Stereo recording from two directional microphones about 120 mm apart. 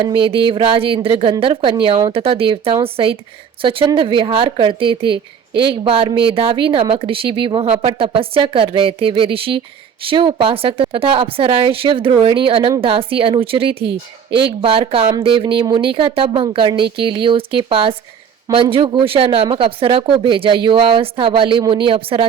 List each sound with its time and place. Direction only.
0.0 s a woman's voice: 45° right (ahead or behind)